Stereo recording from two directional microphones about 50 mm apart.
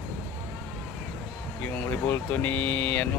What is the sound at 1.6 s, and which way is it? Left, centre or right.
Speech, left.